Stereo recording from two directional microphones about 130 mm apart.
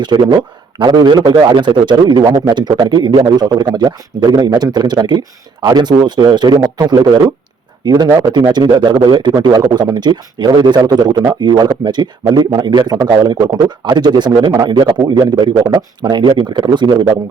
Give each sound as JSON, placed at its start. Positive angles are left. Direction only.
{"t": 0.0, "sound": "a man's voice", "side_deg": -35}